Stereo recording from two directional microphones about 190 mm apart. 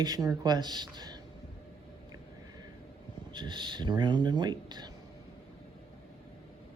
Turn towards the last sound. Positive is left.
turn(degrees=-20)  # may be behind; listen again after turning